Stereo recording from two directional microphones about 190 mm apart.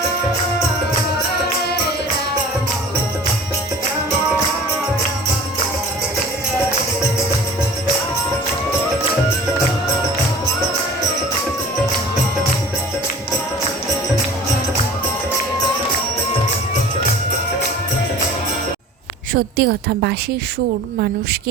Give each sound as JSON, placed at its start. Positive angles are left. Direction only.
{"t": 19.3, "sound": "a woman's voice", "side_deg": -55}